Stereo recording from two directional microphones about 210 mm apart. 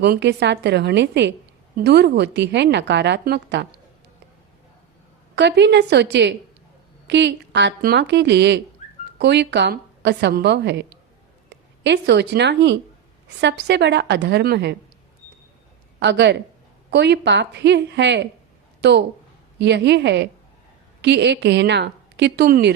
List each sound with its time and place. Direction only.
0.0 s a woman's voice: 50° right (ahead or behind)
5.3 s a woman's voice: 55° right (ahead or behind)
16.0 s a woman's voice: 55° right (ahead or behind)